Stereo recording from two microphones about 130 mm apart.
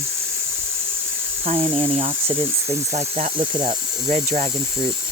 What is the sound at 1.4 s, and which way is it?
Speech, 45° right (ahead or behind).